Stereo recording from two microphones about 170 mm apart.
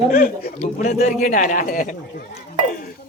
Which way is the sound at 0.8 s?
40° left (ahead or behind).